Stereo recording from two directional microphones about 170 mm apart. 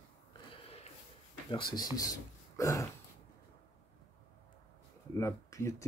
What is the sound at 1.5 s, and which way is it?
Speech, 25° left (ahead or behind).